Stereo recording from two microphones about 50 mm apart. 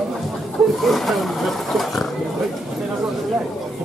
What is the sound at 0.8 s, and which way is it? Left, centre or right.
Speech, centre.